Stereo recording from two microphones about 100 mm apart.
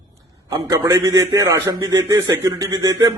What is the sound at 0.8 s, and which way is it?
Speech, 35° right (ahead or behind).